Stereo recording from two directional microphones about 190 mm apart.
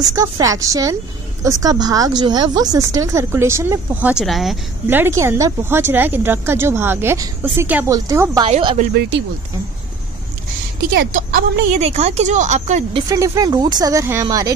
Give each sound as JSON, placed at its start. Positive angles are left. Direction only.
{"t": 0.1, "sound": "speech", "side_deg": -15}
{"t": 4.8, "sound": "speech", "side_deg": -10}
{"t": 8.5, "sound": "speech", "side_deg": -30}
{"t": 10.9, "sound": "a woman's voice", "side_deg": -50}
{"t": 11.8, "sound": "speech", "side_deg": -35}
{"t": 13.1, "sound": "speech", "side_deg": -20}